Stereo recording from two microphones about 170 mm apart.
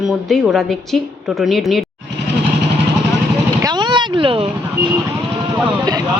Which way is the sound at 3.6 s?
25° right (ahead or behind).